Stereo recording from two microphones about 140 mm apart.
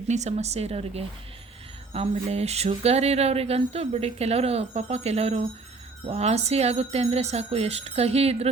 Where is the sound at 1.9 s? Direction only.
50° right (ahead or behind).